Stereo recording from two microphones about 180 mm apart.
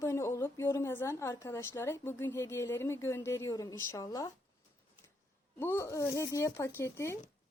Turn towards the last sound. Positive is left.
turn(degrees=15)  # may be behind; listen again after turning